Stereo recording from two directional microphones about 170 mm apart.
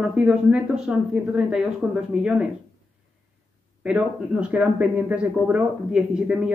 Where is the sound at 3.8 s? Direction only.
5° right (ahead or behind).